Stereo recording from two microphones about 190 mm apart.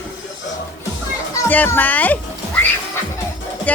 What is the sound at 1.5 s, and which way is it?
A child's voice, 10° left (ahead or behind).